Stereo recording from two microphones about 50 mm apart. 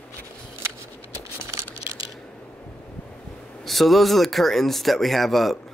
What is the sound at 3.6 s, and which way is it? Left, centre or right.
Speech, centre.